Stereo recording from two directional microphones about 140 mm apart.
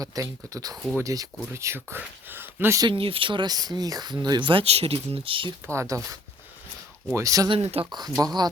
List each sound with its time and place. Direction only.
0.0 s speech: 25° right (ahead or behind)
2.8 s speech: 40° right (ahead or behind)
5.6 s speech: 20° right (ahead or behind)
7.5 s speech: 45° right (ahead or behind)
8.2 s speech: 30° right (ahead or behind)